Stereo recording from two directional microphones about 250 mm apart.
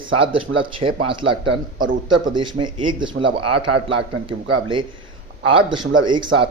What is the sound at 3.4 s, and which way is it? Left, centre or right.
Speech, right.